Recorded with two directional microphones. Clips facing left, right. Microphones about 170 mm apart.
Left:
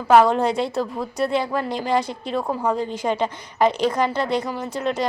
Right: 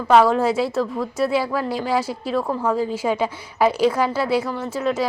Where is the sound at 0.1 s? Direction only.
Centre (ahead or behind).